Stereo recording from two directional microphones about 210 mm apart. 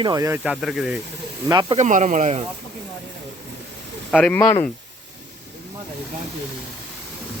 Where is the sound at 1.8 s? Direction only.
35° right (ahead or behind).